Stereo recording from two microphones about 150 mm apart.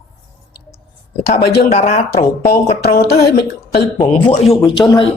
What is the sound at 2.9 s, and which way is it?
Speech, 90° left.